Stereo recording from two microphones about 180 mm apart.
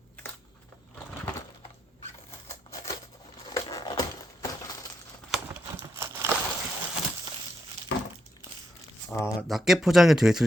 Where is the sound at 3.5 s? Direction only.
20° left (ahead or behind).